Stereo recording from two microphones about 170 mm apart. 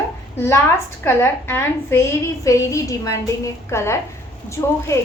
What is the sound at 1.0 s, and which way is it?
A woman's voice, 15° left (ahead or behind).